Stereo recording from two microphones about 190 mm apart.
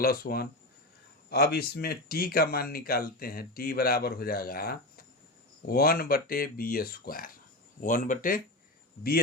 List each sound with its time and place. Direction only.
0.0 s speech: 50° left (ahead or behind)